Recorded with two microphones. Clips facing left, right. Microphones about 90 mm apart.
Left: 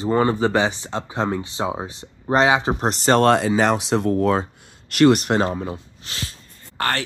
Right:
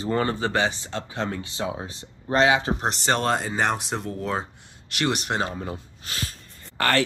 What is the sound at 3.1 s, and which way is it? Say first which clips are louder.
Speech: left 10 dB; 70° left (ahead or behind).